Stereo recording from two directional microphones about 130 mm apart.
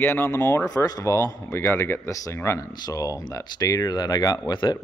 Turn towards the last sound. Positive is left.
turn(degrees=35)  # may be behind; listen again after turning